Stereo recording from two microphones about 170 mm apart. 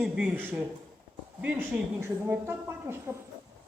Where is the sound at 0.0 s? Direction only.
5° right (ahead or behind).